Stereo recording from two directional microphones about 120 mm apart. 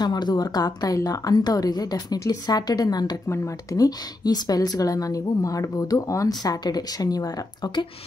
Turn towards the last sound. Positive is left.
turn(degrees=30)  # may be behind; listen again after turning